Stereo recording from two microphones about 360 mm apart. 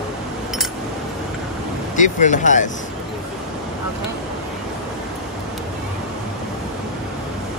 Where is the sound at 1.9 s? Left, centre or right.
Left.